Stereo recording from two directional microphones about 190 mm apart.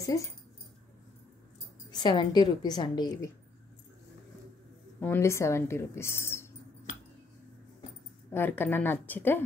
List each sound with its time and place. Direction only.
1.9 s a woman's voice: 20° left (ahead or behind)
5.0 s speech: 10° left (ahead or behind)
8.3 s speech: 10° left (ahead or behind)